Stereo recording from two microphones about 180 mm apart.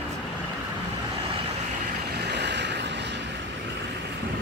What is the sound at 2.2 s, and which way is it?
Vehicle, 70° right (ahead or behind).